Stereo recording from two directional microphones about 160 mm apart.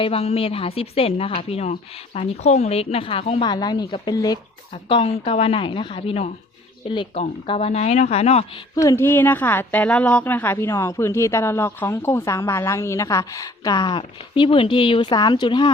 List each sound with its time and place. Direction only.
0.0 s a woman's voice: 40° left (ahead or behind)
3.5 s a woman's voice: 25° left (ahead or behind)
8.7 s a woman's voice: 20° left (ahead or behind)